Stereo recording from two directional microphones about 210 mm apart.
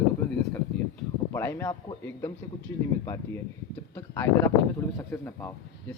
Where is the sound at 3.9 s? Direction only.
10° left (ahead or behind).